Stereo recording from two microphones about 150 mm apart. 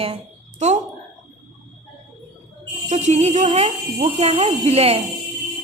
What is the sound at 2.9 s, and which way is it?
A woman's voice, 50° right (ahead or behind).